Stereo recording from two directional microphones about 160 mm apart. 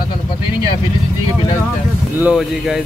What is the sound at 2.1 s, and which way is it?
Speech, 5° right (ahead or behind).